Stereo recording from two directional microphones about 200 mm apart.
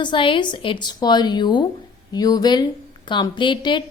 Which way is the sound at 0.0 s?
25° left (ahead or behind).